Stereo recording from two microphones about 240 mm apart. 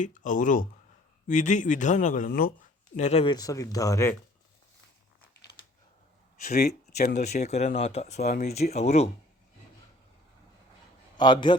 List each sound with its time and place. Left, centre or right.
0.0 s speech: left; by 4.2 s centre
6.9 s speech: left
7.2 s speech: left
11.2 s speech: centre